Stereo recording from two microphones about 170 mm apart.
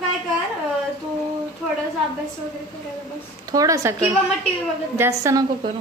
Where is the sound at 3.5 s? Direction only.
20° right (ahead or behind).